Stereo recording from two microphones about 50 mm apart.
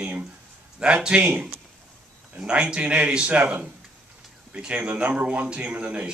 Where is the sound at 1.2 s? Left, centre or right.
Right.